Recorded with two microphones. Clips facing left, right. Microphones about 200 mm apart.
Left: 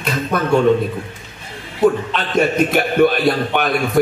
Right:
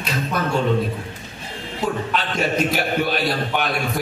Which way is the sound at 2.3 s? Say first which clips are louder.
Left 7 dB; 55° left (ahead or behind).